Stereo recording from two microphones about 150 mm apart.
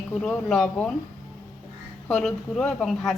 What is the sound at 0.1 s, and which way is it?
Speech, 5° left (ahead or behind).